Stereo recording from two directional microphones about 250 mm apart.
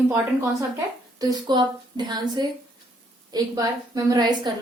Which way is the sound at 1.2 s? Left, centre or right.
Centre.